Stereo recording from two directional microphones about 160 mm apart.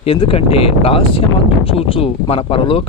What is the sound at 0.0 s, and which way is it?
Speech, 35° left (ahead or behind).